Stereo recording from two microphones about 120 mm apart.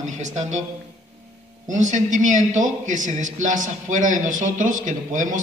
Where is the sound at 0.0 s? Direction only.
80° right.